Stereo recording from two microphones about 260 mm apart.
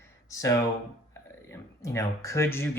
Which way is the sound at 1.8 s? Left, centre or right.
Centre.